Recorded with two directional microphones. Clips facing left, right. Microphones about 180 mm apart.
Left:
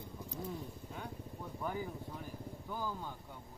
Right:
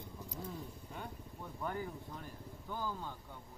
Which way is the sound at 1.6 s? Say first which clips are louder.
Even; 5° left (ahead or behind).